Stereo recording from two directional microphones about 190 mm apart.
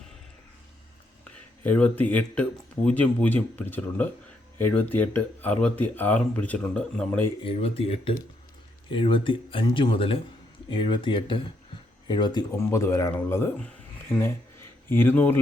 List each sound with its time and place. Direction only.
1.2 s speech: 5° left (ahead or behind)
7.4 s speech: 30° left (ahead or behind); by 13.7 s 10° left (ahead or behind)
14.8 s speech: 10° left (ahead or behind)